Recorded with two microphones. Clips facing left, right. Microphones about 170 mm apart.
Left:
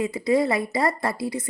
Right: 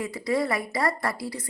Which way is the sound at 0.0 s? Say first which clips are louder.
Left 5 dB; 20° left (ahead or behind).